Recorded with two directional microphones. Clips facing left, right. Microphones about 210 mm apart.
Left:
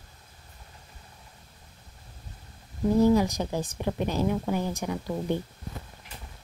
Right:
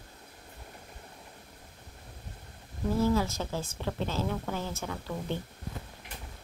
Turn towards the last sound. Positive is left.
turn(degrees=15)  # may be behind; listen again after turning